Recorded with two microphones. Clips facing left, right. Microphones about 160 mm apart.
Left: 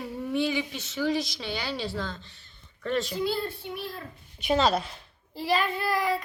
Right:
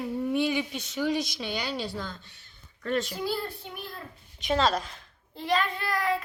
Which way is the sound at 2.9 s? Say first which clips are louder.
Even; centre (ahead or behind).